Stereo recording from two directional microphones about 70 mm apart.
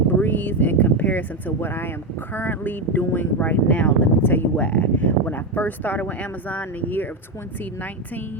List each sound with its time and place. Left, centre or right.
0.2 s a sound: left
2.3 s speech: left
4.5 s speech: centre